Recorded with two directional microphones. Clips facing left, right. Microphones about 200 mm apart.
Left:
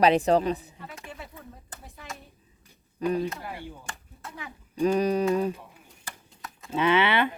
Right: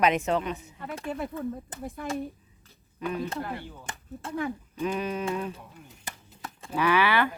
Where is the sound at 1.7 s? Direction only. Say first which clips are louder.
Right 10 dB; 20° right (ahead or behind).